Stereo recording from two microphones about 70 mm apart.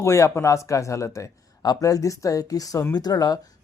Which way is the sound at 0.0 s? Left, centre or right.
Left.